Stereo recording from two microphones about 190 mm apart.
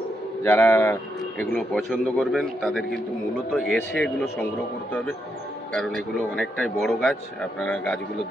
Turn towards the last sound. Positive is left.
turn(degrees=5)  # may be behind; listen again after turning